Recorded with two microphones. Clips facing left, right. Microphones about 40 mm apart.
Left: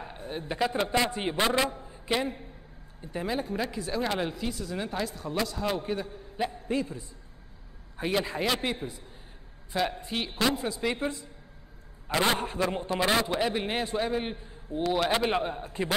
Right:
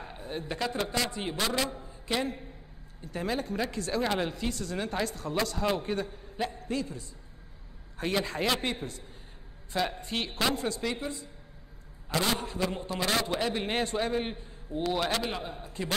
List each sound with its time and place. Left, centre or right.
0.4 s a man's voice: centre
6.7 s a man's voice: left
8.0 s a woman's voice: centre
12.1 s a man's voice: left; by 15.1 s centre
15.1 s a man's voice: left